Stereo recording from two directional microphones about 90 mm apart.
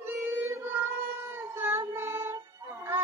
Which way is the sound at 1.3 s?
25° right (ahead or behind).